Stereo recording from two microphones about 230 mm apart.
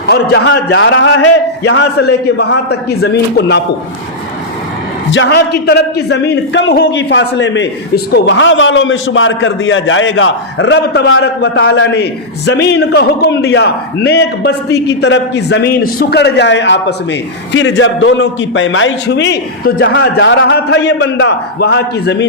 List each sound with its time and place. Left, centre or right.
0.1 s a man's voice: left
5.1 s a man's voice: left